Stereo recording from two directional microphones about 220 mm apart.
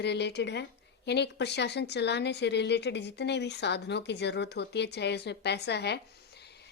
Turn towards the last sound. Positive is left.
turn(degrees=50)  # may be behind; listen again after turning